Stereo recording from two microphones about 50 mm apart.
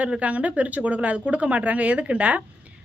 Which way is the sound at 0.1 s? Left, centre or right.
Right.